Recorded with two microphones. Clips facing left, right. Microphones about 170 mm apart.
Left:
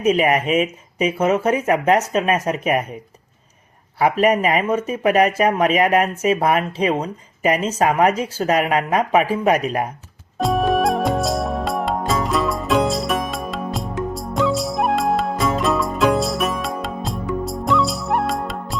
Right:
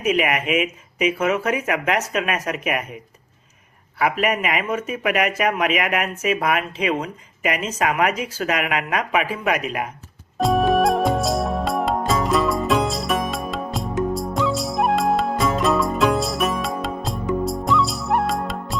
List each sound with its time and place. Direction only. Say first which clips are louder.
0.0 s speech: left 4 dB; 35° left (ahead or behind)
3.9 s speech: left 5 dB; 35° left (ahead or behind)
10.3 s music: right 1 dB; centre (ahead or behind)